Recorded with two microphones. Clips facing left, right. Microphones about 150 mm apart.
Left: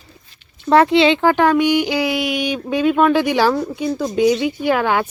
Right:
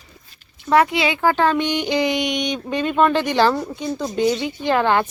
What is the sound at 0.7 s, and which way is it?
Speech, 30° left (ahead or behind).